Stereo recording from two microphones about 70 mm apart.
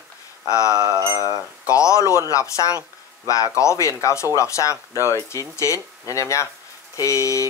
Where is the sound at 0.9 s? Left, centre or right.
Right.